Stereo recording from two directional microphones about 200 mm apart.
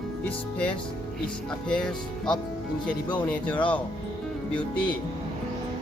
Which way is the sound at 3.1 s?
5° left (ahead or behind).